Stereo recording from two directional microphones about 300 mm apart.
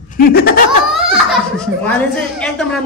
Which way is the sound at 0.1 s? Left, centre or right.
Left.